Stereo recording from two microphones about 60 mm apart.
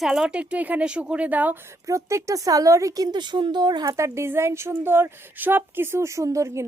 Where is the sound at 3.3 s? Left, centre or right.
Right.